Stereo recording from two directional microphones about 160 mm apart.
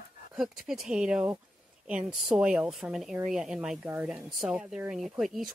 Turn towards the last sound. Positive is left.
turn(degrees=0)  # may be behind; listen again after turning